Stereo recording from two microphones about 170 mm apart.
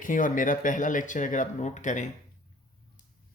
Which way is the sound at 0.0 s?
50° left (ahead or behind).